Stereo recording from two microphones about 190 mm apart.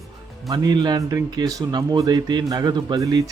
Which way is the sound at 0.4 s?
20° right (ahead or behind).